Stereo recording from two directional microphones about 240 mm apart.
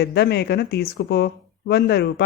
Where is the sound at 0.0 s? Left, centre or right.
Left.